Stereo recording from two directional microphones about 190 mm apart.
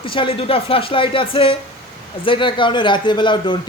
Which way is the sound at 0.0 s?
30° left (ahead or behind).